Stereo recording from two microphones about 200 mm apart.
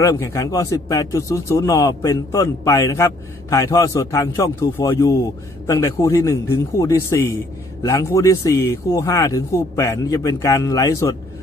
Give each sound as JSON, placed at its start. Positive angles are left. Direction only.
{"t": 0.0, "sound": "speech", "side_deg": 15}